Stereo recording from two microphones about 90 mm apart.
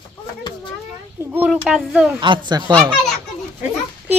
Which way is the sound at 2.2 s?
60° right (ahead or behind).